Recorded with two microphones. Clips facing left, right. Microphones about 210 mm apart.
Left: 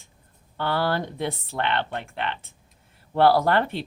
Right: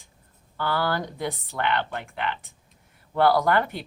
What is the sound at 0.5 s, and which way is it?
Speech, 25° left (ahead or behind).